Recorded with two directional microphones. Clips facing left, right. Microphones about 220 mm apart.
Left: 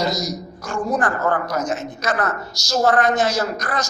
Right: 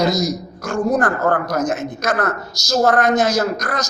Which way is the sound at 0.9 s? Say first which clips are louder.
Right 3 dB; 40° right (ahead or behind).